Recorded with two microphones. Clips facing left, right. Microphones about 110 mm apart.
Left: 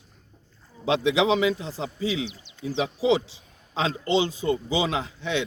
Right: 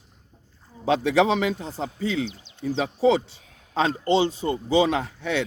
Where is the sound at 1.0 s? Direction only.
50° right (ahead or behind).